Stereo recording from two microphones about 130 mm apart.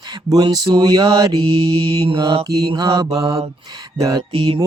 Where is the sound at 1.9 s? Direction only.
45° right (ahead or behind); by 4.2 s 30° right (ahead or behind).